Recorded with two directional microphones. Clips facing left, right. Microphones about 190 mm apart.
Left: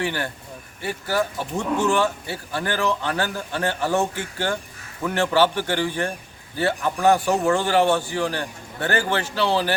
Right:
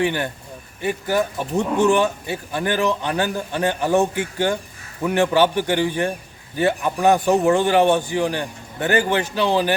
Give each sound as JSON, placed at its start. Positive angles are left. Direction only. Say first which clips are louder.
{"t": 0.0, "sound": "speech", "louder": "right 5 dB", "side_deg": -20}